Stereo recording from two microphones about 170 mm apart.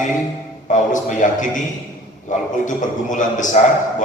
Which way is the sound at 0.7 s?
50° left (ahead or behind).